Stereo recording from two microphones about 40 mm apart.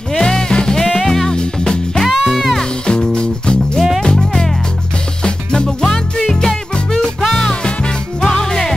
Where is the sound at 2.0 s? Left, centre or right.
Centre.